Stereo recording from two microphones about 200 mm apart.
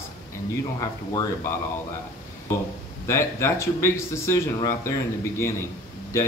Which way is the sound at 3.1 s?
15° left (ahead or behind).